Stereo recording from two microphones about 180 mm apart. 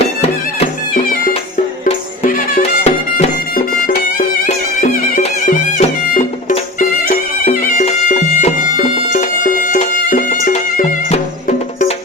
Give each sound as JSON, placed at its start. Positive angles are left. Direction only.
{"t": 2.2, "sound": "music", "side_deg": 40}